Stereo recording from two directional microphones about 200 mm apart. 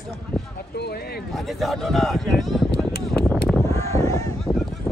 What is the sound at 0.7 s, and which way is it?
Speech, 55° left (ahead or behind).